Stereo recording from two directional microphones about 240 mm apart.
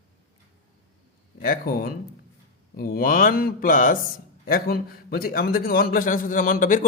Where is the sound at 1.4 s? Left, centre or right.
Left.